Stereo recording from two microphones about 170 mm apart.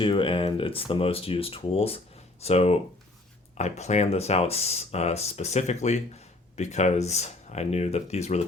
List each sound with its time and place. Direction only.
0.0 s speech: 30° left (ahead or behind)